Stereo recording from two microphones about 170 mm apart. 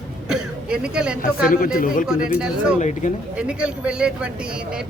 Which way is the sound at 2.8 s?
45° left (ahead or behind).